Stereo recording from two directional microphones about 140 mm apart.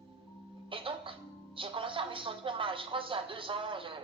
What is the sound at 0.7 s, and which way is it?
A woman's voice, 40° right (ahead or behind).